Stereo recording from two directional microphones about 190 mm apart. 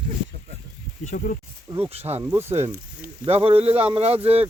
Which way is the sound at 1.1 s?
45° left (ahead or behind).